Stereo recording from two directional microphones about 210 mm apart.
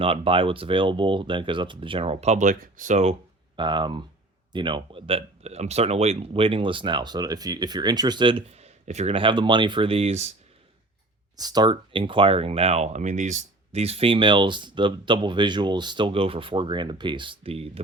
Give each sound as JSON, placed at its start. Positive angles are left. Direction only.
{"t": 0.0, "sound": "speech", "side_deg": -25}
{"t": 11.3, "sound": "speech", "side_deg": -20}